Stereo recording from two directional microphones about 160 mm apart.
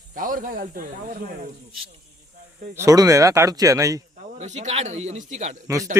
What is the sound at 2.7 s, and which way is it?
Speech, 20° right (ahead or behind).